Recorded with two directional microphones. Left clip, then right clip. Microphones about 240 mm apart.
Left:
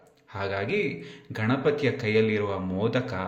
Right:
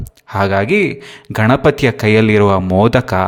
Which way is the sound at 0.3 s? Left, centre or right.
Right.